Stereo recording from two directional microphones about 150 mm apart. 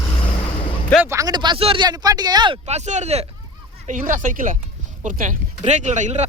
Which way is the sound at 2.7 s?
50° right (ahead or behind).